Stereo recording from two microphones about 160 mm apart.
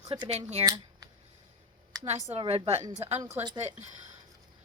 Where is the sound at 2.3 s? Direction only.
35° right (ahead or behind).